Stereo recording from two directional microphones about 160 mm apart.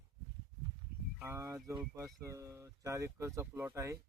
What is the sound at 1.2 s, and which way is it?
Speech, 15° right (ahead or behind).